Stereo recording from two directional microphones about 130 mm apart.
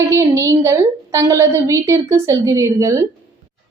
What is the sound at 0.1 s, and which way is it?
A woman's voice, 20° right (ahead or behind).